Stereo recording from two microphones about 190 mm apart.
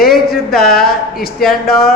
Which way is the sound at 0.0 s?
55° left (ahead or behind).